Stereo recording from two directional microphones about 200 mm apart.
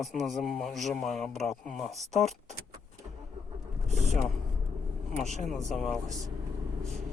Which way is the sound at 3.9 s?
35° right (ahead or behind).